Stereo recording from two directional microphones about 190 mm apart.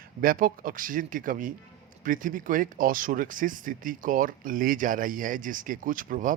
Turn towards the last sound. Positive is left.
turn(degrees=-45)  # may be behind; listen again after turning